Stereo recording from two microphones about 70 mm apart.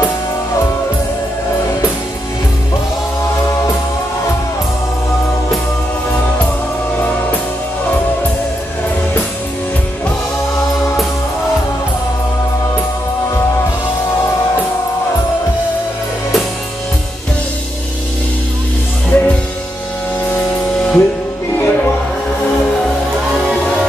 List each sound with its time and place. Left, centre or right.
19.1 s music: left
20.3 s music: centre
23.5 s music: centre